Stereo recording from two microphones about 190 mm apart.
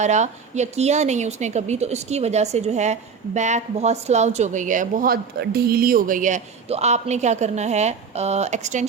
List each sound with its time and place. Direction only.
0.0 s a woman's voice: 40° right (ahead or behind)